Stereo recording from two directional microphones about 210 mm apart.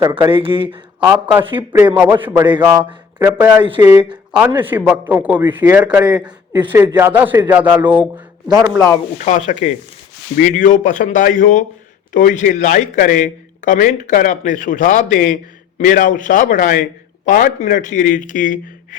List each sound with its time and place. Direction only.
0.0 s speech: 20° right (ahead or behind)
0.9 s a man's voice: 5° right (ahead or behind)
1.5 s speech: 25° right (ahead or behind)
2.0 s a man's voice: 10° right (ahead or behind)
3.8 s a man's voice: 10° right (ahead or behind)
6.5 s a man's voice: 20° right (ahead or behind)
6.9 s a man's voice: 10° right (ahead or behind)
9.1 s speech: 35° left (ahead or behind)